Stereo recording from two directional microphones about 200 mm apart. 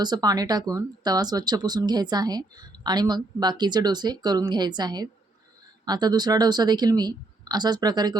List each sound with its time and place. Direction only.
0.0 s speech: 20° right (ahead or behind)